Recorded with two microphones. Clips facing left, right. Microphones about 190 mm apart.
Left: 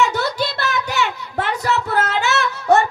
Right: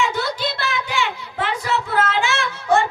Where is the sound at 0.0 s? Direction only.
40° left (ahead or behind).